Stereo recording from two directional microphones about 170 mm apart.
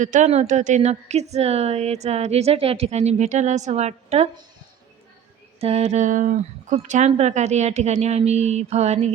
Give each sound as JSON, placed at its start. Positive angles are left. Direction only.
{"t": 0.0, "sound": "a woman's voice", "side_deg": -45}
{"t": 5.5, "sound": "a woman's voice", "side_deg": -35}